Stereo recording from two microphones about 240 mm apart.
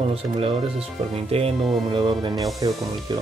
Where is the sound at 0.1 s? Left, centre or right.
Right.